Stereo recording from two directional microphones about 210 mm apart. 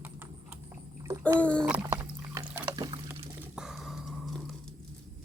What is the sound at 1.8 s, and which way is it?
Pour, 15° right (ahead or behind).